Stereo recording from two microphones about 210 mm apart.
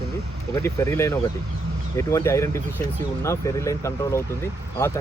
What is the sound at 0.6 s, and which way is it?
Speech, 15° left (ahead or behind).